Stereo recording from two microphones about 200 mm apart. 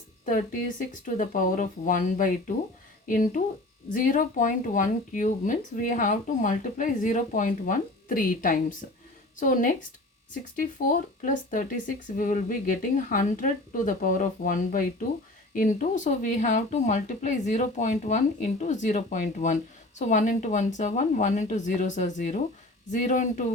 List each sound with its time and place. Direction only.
1.0 s speech: 40° left (ahead or behind)